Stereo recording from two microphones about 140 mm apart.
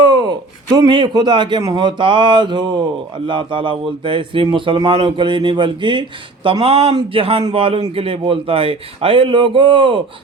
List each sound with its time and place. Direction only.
0.0 s speech: 30° right (ahead or behind)